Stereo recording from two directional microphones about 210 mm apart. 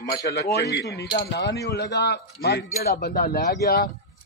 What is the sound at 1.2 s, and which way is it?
A man's voice, 50° left (ahead or behind).